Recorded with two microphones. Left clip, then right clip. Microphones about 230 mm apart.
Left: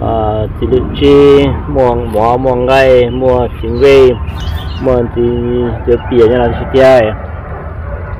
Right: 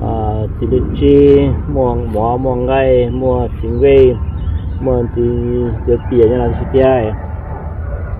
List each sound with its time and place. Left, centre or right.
0.0 s speech: centre